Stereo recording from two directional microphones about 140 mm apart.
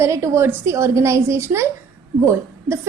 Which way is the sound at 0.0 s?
20° right (ahead or behind).